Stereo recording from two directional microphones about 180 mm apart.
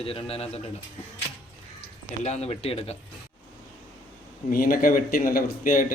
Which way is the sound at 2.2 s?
35° left (ahead or behind).